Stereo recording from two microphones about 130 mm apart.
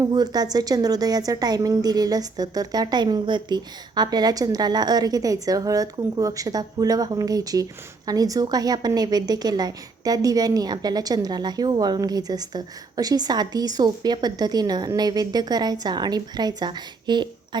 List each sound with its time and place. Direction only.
0.0 s a woman's voice: 30° right (ahead or behind)